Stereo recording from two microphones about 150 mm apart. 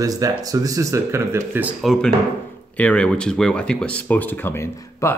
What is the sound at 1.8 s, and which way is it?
Speech, centre (ahead or behind).